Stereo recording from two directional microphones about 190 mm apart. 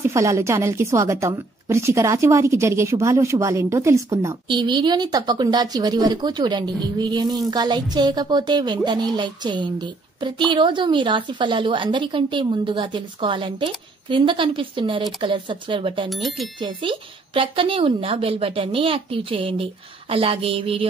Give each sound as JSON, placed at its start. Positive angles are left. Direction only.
{"t": 0.0, "sound": "a woman's voice", "side_deg": -15}
{"t": 16.1, "sound": "speech", "side_deg": 0}
{"t": 16.5, "sound": "a woman's voice", "side_deg": -25}